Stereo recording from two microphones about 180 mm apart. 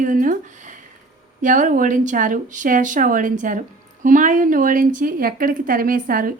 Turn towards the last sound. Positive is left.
turn(degrees=-50)  # may be behind; listen again after turning